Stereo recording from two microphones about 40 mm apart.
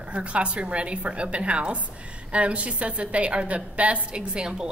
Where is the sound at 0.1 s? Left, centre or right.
Right.